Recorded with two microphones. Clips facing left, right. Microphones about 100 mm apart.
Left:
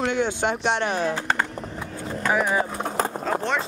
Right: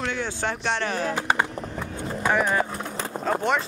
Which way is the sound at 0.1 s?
20° left (ahead or behind).